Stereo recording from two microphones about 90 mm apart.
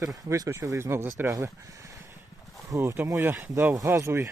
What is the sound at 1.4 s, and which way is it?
Speech, 40° right (ahead or behind).